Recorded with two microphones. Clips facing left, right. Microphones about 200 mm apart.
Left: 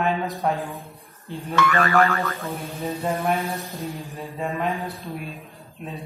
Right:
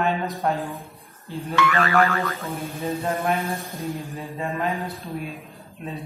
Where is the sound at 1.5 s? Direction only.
45° left (ahead or behind).